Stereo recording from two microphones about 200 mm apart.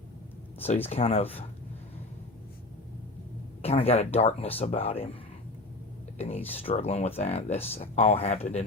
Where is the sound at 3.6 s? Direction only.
30° left (ahead or behind).